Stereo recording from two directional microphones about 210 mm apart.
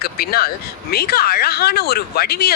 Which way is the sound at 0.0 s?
45° left (ahead or behind).